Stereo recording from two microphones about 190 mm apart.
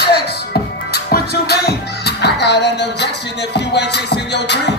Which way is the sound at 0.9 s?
60° left (ahead or behind).